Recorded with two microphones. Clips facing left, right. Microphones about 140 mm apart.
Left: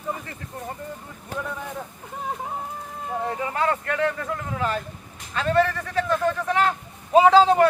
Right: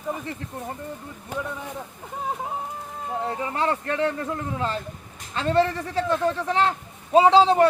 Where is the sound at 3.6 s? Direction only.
25° right (ahead or behind).